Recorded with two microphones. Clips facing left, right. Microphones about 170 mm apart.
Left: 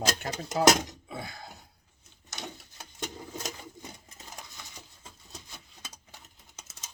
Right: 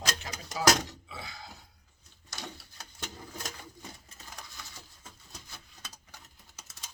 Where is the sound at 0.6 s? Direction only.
20° left (ahead or behind).